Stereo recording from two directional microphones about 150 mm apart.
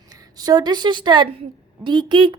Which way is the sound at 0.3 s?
25° right (ahead or behind).